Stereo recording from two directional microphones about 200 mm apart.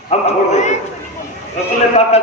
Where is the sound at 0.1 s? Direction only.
35° left (ahead or behind).